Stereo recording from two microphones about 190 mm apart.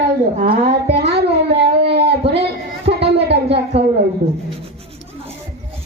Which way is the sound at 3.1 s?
60° right (ahead or behind).